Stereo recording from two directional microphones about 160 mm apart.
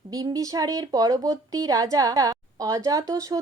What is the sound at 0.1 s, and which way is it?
Speech, 20° right (ahead or behind).